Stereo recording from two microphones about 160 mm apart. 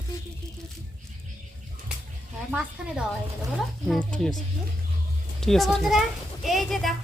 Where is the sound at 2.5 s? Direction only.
5° right (ahead or behind).